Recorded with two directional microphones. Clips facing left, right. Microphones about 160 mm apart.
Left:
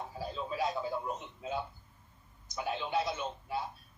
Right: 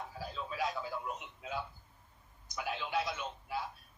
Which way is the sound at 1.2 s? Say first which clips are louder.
Left 3 dB; 25° left (ahead or behind).